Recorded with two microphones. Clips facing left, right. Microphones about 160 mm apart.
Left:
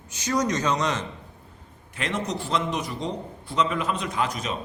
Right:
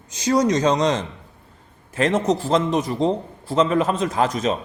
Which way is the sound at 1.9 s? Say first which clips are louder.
Right 9 dB; 45° right (ahead or behind).